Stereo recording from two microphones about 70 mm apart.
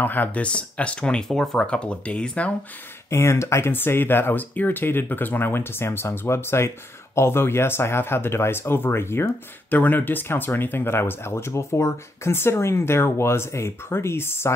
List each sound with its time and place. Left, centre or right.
0.0 s speech: left
3.1 s speech: left